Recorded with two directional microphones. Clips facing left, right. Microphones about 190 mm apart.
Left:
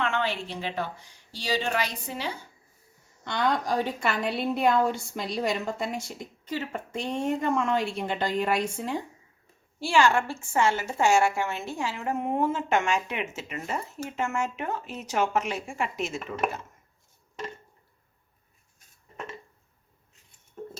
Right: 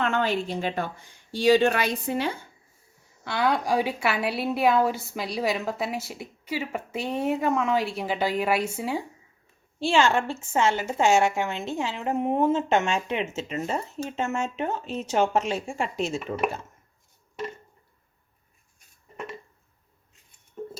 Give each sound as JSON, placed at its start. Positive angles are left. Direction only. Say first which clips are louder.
{"t": 0.0, "sound": "a woman's voice", "louder": "right 4 dB", "side_deg": -45}
{"t": 3.2, "sound": "a woman's voice", "louder": "right 2 dB", "side_deg": -10}
{"t": 9.8, "sound": "a woman's voice", "louder": "right 1 dB", "side_deg": -20}